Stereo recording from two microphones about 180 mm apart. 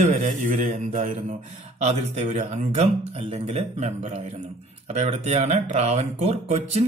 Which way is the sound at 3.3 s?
35° right (ahead or behind).